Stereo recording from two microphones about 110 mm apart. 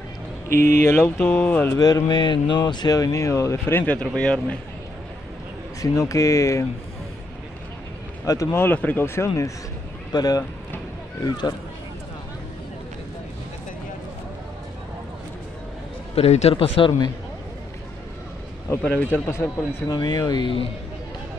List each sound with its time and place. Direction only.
0.5 s speech: 25° left (ahead or behind)
1.8 s speech: 35° left (ahead or behind); by 4.6 s 10° left (ahead or behind)
5.8 s speech: 30° left (ahead or behind)
8.3 s speech: 30° left (ahead or behind)
8.6 s speech: 15° left (ahead or behind)
10.1 s speech: 35° left (ahead or behind)
16.2 s speech: 80° left
16.7 s a man's voice: 50° left (ahead or behind)
18.8 s speech: 15° left (ahead or behind)
19.9 s speech: 35° left (ahead or behind)